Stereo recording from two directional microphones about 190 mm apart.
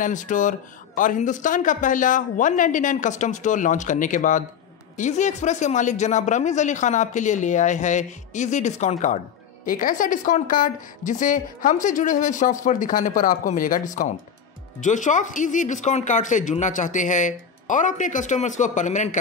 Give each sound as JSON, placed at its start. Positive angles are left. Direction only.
{"t": 0.0, "sound": "speech", "side_deg": 40}